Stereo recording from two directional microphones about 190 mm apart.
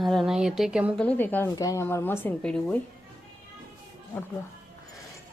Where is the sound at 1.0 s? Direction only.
10° left (ahead or behind).